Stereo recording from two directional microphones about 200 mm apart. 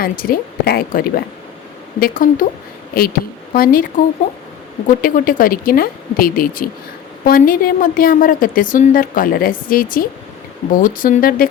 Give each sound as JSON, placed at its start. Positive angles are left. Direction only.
{"t": 0.0, "sound": "a woman's voice", "side_deg": 45}
{"t": 5.0, "sound": "a woman's voice", "side_deg": 45}